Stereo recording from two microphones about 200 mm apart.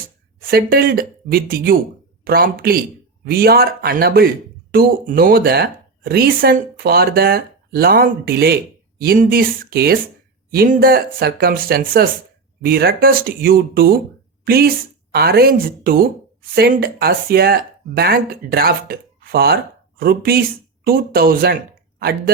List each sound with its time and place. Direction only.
0.3 s a woman's voice: 45° right (ahead or behind)